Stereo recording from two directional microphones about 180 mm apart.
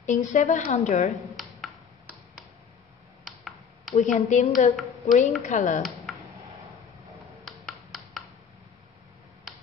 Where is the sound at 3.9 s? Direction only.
35° left (ahead or behind).